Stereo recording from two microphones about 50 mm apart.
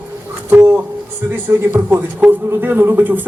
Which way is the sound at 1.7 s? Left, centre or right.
Right.